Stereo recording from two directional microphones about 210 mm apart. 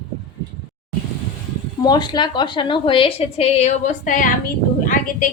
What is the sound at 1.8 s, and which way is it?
A woman's voice, 20° left (ahead or behind).